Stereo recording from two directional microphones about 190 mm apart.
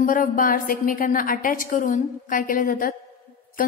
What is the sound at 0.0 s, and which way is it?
A woman's voice, 45° left (ahead or behind).